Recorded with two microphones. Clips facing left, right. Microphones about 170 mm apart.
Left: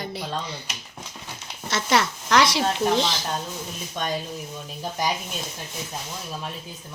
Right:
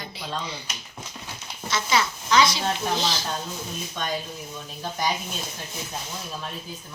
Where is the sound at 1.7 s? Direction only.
70° left (ahead or behind).